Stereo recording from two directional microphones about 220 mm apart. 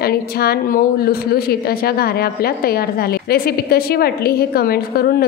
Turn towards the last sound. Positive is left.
turn(degrees=45)  # may be behind; listen again after turning